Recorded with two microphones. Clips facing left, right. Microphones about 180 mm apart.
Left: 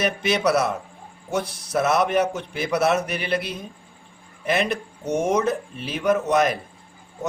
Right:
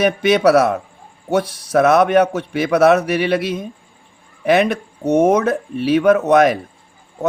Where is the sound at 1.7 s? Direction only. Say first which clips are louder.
Right 8 dB; 65° right (ahead or behind).